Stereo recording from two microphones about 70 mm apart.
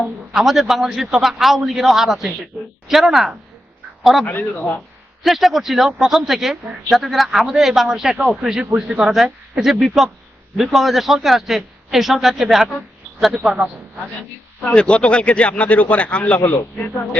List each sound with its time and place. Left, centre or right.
0.0 s speech: centre
2.5 s a sound: centre
2.9 s speech: centre
4.3 s speech: left
5.2 s speech: centre
14.6 s speech: centre